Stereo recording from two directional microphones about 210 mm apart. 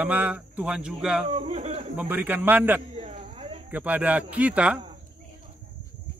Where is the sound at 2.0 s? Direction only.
10° right (ahead or behind).